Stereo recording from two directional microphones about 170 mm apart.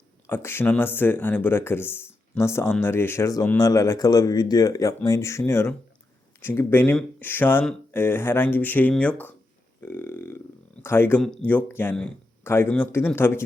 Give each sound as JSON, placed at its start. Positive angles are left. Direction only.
{"t": 0.3, "sound": "speech", "side_deg": 15}
{"t": 9.8, "sound": "burping", "side_deg": 15}
{"t": 10.8, "sound": "speech", "side_deg": 15}